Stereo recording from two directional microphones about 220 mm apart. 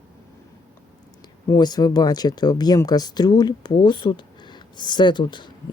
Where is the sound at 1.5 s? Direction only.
20° left (ahead or behind).